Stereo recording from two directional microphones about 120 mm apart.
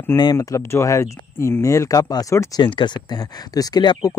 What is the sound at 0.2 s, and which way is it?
Speech, 30° left (ahead or behind).